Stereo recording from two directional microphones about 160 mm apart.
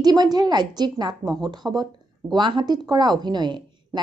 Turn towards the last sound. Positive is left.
turn(degrees=-25)  # may be behind; listen again after turning